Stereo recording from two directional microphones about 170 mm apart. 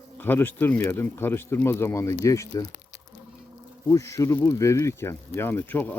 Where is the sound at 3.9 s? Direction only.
15° left (ahead or behind).